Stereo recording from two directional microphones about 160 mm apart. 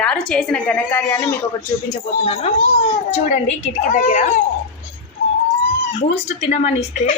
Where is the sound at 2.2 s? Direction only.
40° left (ahead or behind).